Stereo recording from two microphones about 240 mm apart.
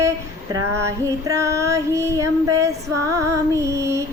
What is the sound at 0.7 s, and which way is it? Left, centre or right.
Child singing, centre.